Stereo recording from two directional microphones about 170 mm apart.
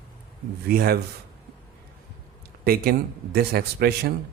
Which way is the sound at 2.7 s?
65° right (ahead or behind).